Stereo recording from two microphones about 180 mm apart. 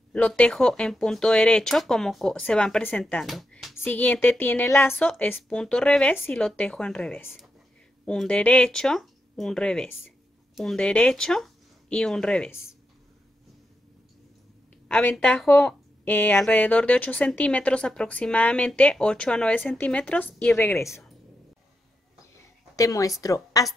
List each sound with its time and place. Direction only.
0.1 s speech: 5° left (ahead or behind)
14.9 s speech: 5° left (ahead or behind)
22.8 s a woman's voice: 20° left (ahead or behind)